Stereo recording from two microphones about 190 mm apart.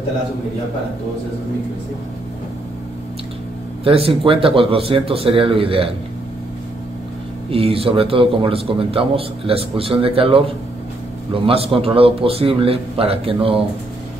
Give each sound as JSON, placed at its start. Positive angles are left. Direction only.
{"t": 3.8, "sound": "a man's voice", "side_deg": -30}
{"t": 7.5, "sound": "a man's voice", "side_deg": -30}